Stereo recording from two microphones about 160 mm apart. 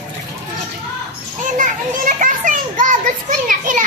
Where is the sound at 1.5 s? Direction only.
55° right (ahead or behind).